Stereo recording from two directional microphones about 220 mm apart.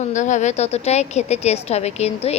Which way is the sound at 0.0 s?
35° left (ahead or behind).